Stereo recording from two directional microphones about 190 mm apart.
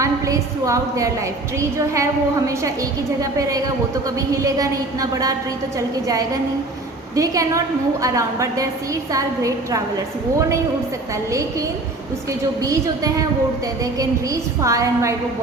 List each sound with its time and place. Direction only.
0.0 s a woman's voice: 15° right (ahead or behind)
12.6 s a woman's voice: 15° right (ahead or behind)
14.6 s a woman's voice: 15° right (ahead or behind)